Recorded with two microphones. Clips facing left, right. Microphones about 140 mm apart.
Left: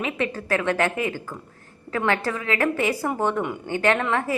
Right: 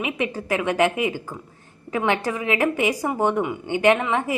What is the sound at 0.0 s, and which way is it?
A woman's voice, 15° right (ahead or behind).